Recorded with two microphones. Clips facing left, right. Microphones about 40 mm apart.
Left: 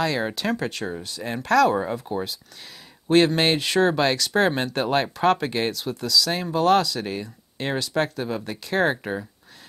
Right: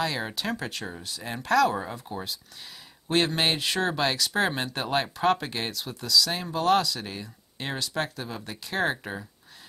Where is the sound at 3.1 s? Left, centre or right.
Centre.